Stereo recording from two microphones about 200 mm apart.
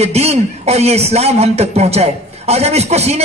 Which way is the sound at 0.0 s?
30° right (ahead or behind).